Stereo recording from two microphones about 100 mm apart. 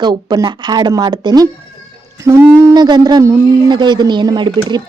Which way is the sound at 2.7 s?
45° right (ahead or behind).